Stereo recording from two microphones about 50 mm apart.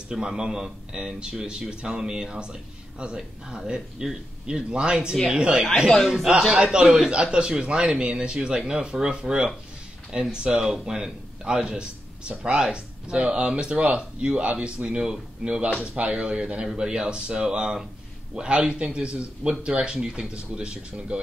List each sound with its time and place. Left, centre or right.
0.1 s speech: centre
5.9 s a man's voice: centre; by 21.2 s right